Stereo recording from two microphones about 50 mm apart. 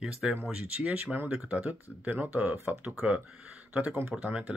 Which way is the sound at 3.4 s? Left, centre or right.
Right.